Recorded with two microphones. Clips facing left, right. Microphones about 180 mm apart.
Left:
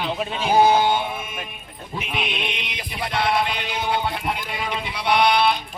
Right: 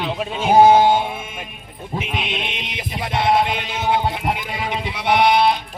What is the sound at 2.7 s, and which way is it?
Music, 20° right (ahead or behind).